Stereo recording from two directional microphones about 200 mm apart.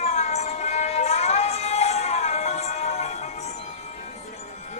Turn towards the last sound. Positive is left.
turn(degrees=35)  # may be behind; listen again after turning